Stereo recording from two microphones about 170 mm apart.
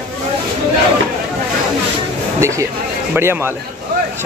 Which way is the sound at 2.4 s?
15° right (ahead or behind).